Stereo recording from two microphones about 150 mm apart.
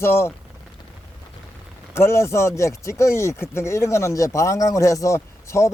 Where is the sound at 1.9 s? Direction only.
15° left (ahead or behind).